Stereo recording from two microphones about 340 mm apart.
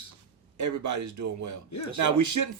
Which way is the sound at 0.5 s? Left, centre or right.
Right.